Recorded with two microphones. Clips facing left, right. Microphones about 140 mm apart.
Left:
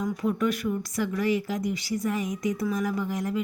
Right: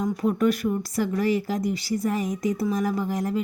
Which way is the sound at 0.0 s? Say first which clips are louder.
Right 4 dB; 35° right (ahead or behind).